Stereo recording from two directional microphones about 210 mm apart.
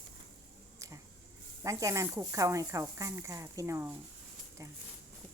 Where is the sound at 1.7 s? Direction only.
15° right (ahead or behind).